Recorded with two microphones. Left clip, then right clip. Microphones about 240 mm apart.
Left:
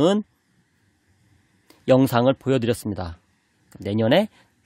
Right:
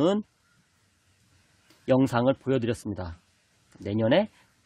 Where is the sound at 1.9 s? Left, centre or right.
Left.